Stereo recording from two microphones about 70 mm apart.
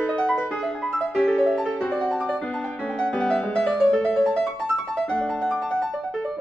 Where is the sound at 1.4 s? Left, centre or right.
Centre.